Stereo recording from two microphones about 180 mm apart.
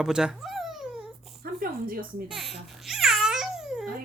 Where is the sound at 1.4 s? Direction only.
55° right (ahead or behind).